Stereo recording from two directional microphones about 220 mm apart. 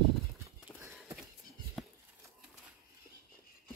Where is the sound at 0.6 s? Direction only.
10° right (ahead or behind).